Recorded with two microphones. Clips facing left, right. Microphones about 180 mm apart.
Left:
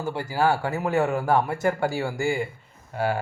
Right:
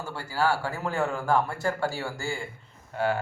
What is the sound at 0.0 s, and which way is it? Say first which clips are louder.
Speech: left 4 dB; 15° left (ahead or behind).